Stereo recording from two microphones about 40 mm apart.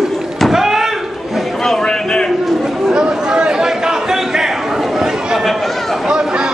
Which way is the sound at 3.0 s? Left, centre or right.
Right.